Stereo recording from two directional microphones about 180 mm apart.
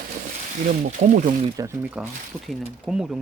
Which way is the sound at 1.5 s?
10° right (ahead or behind).